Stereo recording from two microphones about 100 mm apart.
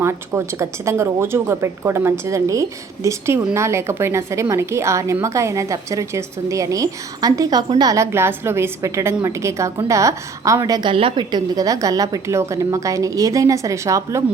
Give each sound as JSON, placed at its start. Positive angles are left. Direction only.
{"t": 0.0, "sound": "a woman's voice", "side_deg": -25}
{"t": 10.8, "sound": "a woman's voice", "side_deg": -60}
{"t": 11.3, "sound": "a woman's voice", "side_deg": -45}